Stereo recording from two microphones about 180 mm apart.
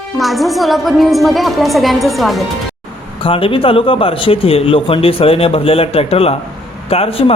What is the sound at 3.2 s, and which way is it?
Speech, 30° left (ahead or behind).